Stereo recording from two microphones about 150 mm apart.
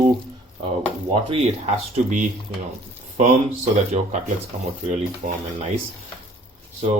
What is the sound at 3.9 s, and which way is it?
Speech, 45° right (ahead or behind).